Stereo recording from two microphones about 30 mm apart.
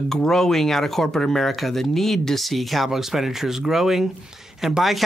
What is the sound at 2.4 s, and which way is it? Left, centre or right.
Speech, centre.